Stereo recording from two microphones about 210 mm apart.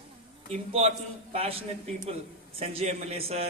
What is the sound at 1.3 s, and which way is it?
Speech, 30° right (ahead or behind).